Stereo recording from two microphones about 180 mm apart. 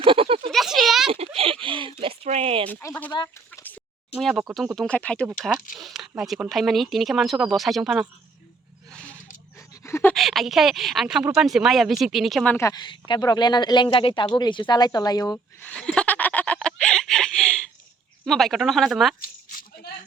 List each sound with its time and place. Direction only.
0.0 s a sound: 30° right (ahead or behind)
0.5 s a sound: centre (ahead or behind)
1.6 s a sound: 30° right (ahead or behind)
2.6 s speech: 10° left (ahead or behind)
3.1 s speech: 25° left (ahead or behind)
4.2 s speech: centre (ahead or behind)
9.6 s dog: 15° left (ahead or behind)
10.2 s speech: centre (ahead or behind)
12.5 s speech: 20° left (ahead or behind)
15.6 s a sound: 5° left (ahead or behind)
18.3 s speech: centre (ahead or behind)
19.2 s goat: 50° left (ahead or behind)